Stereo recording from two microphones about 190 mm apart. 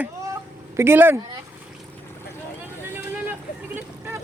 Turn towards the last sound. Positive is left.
turn(degrees=-10)  # may be behind; listen again after turning